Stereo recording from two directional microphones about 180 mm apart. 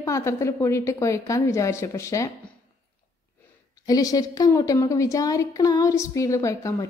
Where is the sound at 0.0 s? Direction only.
15° left (ahead or behind).